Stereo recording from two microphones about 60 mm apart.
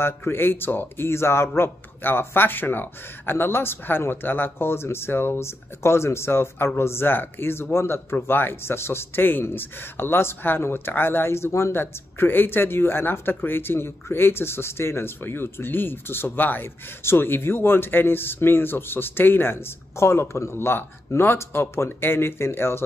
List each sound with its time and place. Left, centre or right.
0.0 s speech: left